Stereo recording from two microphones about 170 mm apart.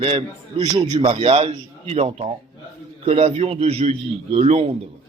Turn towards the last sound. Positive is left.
turn(degrees=-35)  # may be behind; listen again after turning